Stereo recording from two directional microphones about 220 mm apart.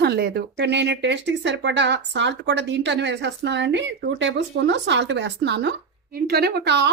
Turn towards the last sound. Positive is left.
turn(degrees=-50)  # may be behind; listen again after turning